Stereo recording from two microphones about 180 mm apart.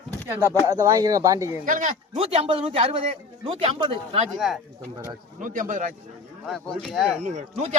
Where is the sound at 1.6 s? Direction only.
50° right (ahead or behind).